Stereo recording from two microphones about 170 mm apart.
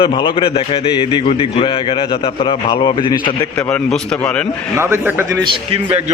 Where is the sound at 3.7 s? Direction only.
5° left (ahead or behind).